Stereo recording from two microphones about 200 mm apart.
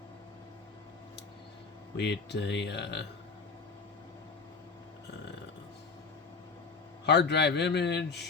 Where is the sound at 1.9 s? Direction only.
60° left (ahead or behind).